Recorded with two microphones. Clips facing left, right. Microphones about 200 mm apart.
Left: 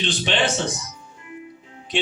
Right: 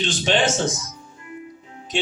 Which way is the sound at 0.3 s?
45° right (ahead or behind).